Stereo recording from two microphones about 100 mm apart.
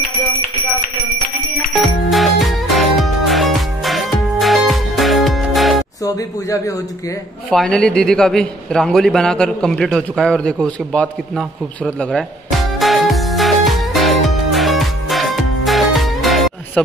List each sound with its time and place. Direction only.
2.0 s music: centre (ahead or behind)
6.0 s speech: 35° left (ahead or behind)
7.5 s a sound: 5° left (ahead or behind)
16.8 s chopping: 5° left (ahead or behind)